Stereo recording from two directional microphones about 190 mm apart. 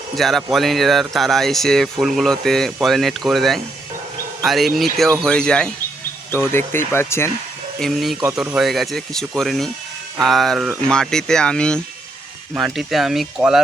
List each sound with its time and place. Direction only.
0.2 s speech: centre (ahead or behind)
7.8 s speech: centre (ahead or behind)